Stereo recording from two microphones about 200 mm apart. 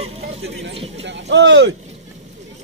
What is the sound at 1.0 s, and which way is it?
Speech, 60° right (ahead or behind).